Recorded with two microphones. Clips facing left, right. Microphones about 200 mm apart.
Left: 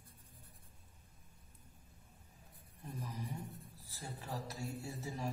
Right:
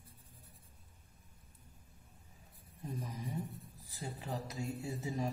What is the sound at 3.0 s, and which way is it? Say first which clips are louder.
A man's voice: right 2 dB; 15° right (ahead or behind).